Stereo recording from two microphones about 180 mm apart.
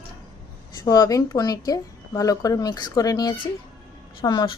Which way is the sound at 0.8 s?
20° left (ahead or behind).